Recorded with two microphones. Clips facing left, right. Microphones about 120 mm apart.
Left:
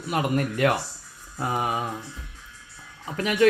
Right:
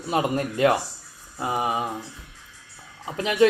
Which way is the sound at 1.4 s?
5° right (ahead or behind).